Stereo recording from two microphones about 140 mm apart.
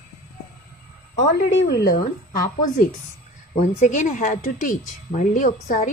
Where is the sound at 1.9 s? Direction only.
70° left (ahead or behind).